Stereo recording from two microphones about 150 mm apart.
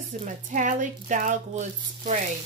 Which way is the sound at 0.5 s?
60° right (ahead or behind).